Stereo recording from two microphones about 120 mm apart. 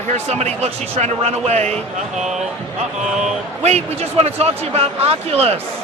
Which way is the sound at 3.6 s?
60° right (ahead or behind).